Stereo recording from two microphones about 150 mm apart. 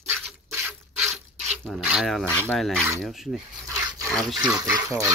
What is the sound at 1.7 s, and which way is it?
Mechanisms, centre (ahead or behind).